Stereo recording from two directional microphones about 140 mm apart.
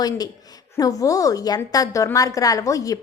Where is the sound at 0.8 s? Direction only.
25° left (ahead or behind).